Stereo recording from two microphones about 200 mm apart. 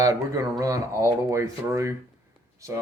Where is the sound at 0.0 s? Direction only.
15° right (ahead or behind).